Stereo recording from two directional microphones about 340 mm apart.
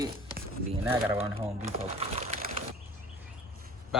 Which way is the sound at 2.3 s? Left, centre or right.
Centre.